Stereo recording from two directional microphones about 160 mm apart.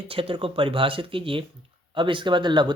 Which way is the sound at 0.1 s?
35° right (ahead or behind).